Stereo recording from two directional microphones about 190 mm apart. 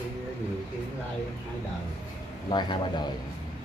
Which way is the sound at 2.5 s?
25° left (ahead or behind).